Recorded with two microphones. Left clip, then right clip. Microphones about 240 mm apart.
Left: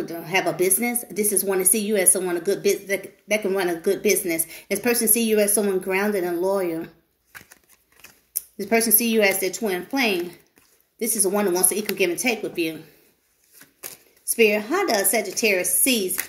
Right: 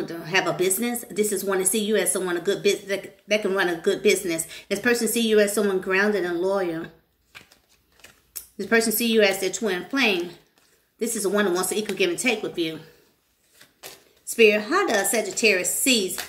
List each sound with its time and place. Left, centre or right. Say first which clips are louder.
0.0 s speech: even; centre
8.5 s speech: even; centre
14.3 s speech: right 1 dB; centre